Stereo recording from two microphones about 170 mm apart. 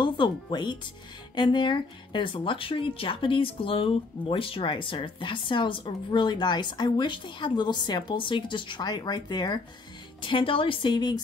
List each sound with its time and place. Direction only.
0.0 s speech: 25° left (ahead or behind)